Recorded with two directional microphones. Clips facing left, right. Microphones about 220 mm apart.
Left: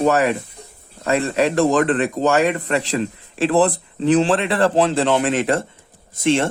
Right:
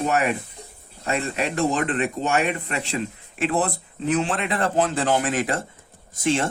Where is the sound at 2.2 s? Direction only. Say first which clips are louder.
Left 6 dB; 35° left (ahead or behind).